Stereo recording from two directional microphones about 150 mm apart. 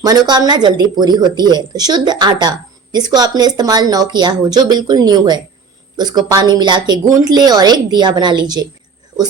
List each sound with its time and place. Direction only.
0.0 s speech: 25° right (ahead or behind)